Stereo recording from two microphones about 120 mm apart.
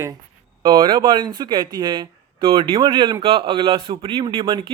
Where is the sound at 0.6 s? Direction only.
40° right (ahead or behind).